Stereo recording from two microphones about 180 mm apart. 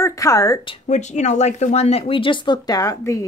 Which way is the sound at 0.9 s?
40° left (ahead or behind).